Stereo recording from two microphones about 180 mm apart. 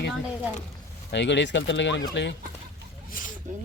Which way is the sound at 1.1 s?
75° left (ahead or behind).